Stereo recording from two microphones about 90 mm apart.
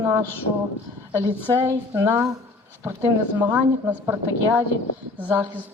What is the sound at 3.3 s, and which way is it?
A woman's voice, 20° right (ahead or behind).